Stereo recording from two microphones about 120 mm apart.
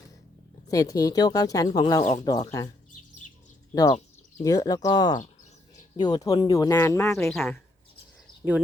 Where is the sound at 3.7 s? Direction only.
35° left (ahead or behind).